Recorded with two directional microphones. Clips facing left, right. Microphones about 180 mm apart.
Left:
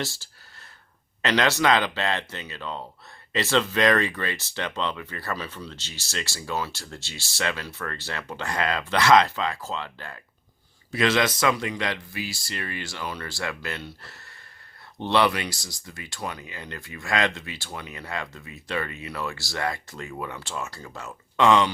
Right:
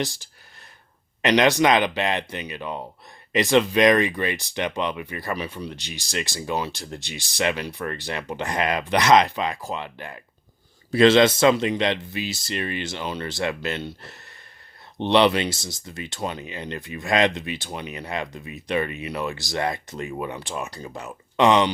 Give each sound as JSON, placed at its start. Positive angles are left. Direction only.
{"t": 0.0, "sound": "speech", "side_deg": -15}
{"t": 10.9, "sound": "speech", "side_deg": -30}